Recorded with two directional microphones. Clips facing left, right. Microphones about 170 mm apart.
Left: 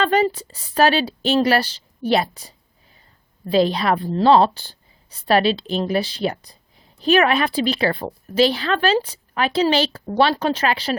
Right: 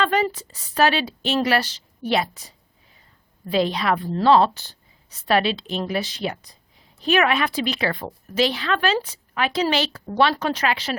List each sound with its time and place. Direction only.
0.0 s a woman's voice: 35° left (ahead or behind)
3.5 s a woman's voice: 35° left (ahead or behind)